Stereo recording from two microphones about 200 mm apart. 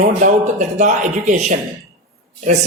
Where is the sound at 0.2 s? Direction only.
35° right (ahead or behind).